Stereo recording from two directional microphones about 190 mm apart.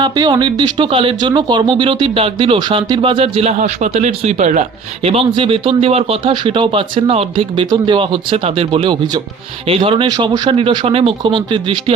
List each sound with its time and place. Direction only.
0.0 s speech: 25° right (ahead or behind)
3.6 s speech: 40° right (ahead or behind); by 11.9 s 25° right (ahead or behind)